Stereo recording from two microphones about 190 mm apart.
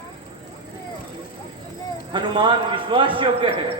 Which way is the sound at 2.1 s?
25° right (ahead or behind).